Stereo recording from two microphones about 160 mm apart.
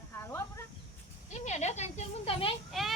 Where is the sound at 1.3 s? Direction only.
45° left (ahead or behind).